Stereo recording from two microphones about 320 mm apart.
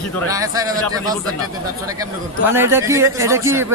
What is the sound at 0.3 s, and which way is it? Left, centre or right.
Speech, centre.